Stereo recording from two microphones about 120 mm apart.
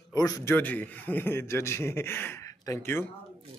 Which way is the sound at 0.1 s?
30° left (ahead or behind).